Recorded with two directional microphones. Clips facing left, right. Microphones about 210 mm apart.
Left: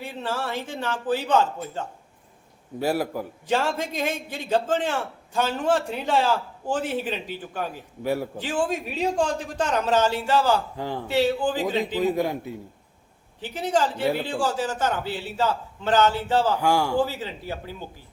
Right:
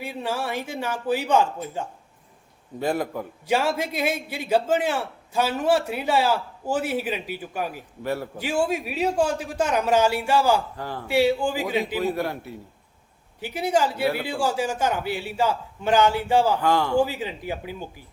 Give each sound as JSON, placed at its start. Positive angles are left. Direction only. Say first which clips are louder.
{"t": 0.0, "sound": "a man's voice", "louder": "right 1 dB", "side_deg": -10}
{"t": 2.7, "sound": "a man's voice", "louder": "left 1 dB", "side_deg": 10}
{"t": 3.4, "sound": "a man's voice", "louder": "right 2 dB", "side_deg": -10}
{"t": 8.0, "sound": "a man's voice", "louder": "left 2 dB", "side_deg": 10}
{"t": 8.4, "sound": "a man's voice", "louder": "right 2 dB", "side_deg": -10}
{"t": 10.8, "sound": "a man's voice", "louder": "left 3 dB", "side_deg": 20}
{"t": 11.1, "sound": "a man's voice", "louder": "right 2 dB", "side_deg": -10}
{"t": 12.0, "sound": "a man's voice", "louder": "left 2 dB", "side_deg": 15}
{"t": 13.4, "sound": "a man's voice", "louder": "right 1 dB", "side_deg": -10}
{"t": 16.6, "sound": "a man's voice", "louder": "right 1 dB", "side_deg": 10}
{"t": 17.0, "sound": "a man's voice", "louder": "right 2 dB", "side_deg": -15}